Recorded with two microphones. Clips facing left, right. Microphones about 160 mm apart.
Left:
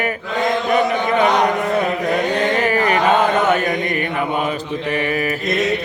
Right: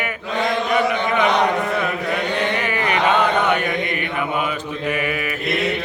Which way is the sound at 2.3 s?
40° left (ahead or behind).